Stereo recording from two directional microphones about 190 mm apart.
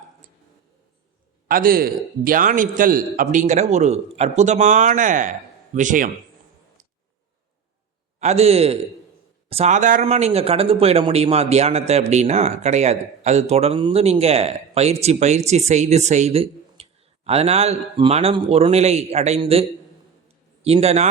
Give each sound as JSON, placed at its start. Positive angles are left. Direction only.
{"t": 1.5, "sound": "a man's voice", "side_deg": -50}
{"t": 8.2, "sound": "speech", "side_deg": -35}
{"t": 20.2, "sound": "a sound", "side_deg": -30}